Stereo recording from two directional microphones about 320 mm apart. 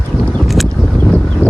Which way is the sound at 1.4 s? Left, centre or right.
Centre.